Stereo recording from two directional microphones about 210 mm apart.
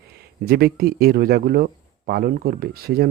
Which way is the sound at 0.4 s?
45° right (ahead or behind).